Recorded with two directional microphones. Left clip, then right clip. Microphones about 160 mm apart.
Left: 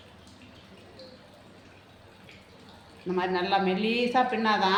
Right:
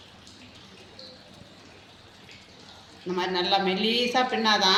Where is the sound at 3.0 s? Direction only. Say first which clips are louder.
Right 1 dB; 20° left (ahead or behind).